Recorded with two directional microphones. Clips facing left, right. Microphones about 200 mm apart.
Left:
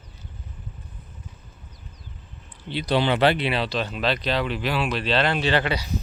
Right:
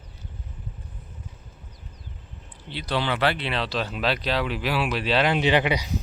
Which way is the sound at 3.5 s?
Centre (ahead or behind).